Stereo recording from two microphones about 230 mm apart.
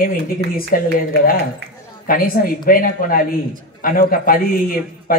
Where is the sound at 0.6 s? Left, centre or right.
Left.